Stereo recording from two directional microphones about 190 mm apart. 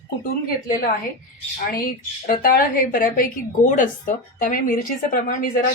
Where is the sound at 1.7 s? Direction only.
50° left (ahead or behind).